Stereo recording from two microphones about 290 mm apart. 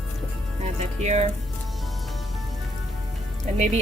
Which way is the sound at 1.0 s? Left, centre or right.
Right.